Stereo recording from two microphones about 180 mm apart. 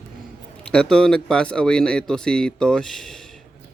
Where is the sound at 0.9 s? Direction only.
5° left (ahead or behind).